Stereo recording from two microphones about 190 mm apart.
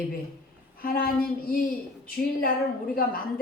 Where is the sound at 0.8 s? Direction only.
50° left (ahead or behind).